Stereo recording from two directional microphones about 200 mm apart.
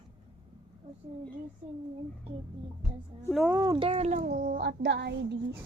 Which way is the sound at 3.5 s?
15° right (ahead or behind).